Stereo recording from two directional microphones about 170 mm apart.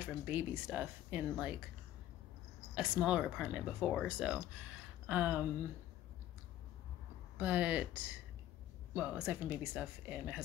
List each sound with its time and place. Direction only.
0.0 s speech: 10° right (ahead or behind)
2.7 s speech: 5° right (ahead or behind)
7.3 s speech: 10° right (ahead or behind)